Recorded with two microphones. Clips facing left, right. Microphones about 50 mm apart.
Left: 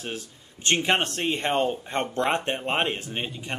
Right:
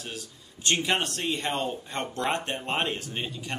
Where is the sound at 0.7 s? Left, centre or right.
Left.